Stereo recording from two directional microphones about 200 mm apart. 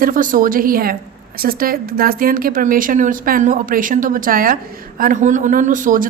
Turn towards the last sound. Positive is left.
turn(degrees=-40)  # may be behind; listen again after turning